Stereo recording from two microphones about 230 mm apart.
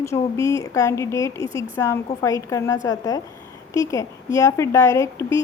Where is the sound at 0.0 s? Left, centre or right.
Centre.